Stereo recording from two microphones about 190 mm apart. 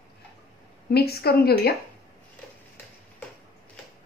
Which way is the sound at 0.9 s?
55° left (ahead or behind).